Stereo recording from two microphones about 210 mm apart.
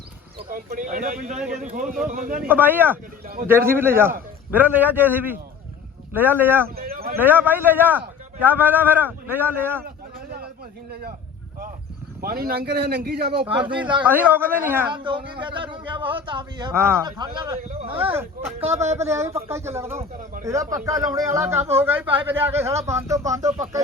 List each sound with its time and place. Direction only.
0.5 s speech: 40° right (ahead or behind)
1.4 s speech: centre (ahead or behind)
1.7 s speech: 40° right (ahead or behind)
2.5 s a man's voice: 10° right (ahead or behind)
6.7 s a sound: 45° right (ahead or behind)
7.2 s a man's voice: 10° right (ahead or behind)
9.8 s a sound: 45° right (ahead or behind)
12.2 s a man's voice: 45° right (ahead or behind)
13.4 s a man's voice: 25° right (ahead or behind)
14.0 s a man's voice: 10° right (ahead or behind)
14.9 s a man's voice: 20° right (ahead or behind)
18.9 s a man's voice: 15° right (ahead or behind)